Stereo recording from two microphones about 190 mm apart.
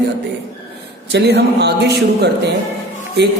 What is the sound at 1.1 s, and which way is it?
Speech, 60° right (ahead or behind).